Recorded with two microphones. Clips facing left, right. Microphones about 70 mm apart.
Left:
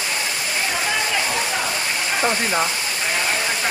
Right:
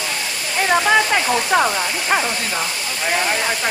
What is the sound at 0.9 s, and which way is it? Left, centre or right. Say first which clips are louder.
Speech: right 7 dB; right.